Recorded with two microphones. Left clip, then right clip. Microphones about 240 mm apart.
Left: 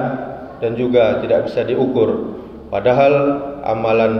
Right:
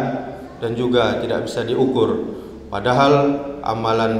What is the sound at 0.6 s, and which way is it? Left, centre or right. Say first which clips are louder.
A man's voice: left 4 dB; right.